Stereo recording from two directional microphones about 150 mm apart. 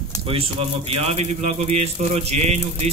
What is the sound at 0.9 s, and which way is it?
Speech, 45° right (ahead or behind).